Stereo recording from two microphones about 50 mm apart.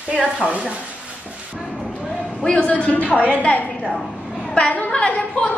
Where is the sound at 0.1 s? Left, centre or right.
Right.